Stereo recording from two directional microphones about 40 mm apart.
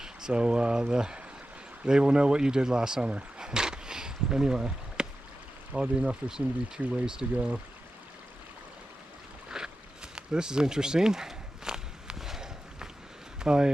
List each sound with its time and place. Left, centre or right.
0.0 s speech: centre
9.5 s boat: centre
10.2 s walk: centre
13.4 s speech: centre